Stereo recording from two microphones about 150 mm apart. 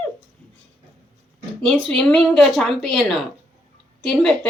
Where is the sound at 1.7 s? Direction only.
5° left (ahead or behind).